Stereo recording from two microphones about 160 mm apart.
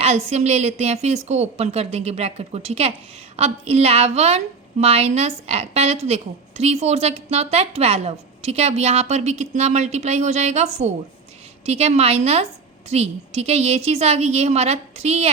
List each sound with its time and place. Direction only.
0.0 s a woman's voice: 40° right (ahead or behind)